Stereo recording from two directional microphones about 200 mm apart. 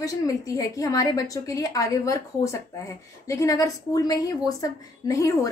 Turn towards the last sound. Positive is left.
turn(degrees=15)  # may be behind; listen again after turning